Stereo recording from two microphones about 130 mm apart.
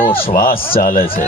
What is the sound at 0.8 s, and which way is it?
Speech, 90° left.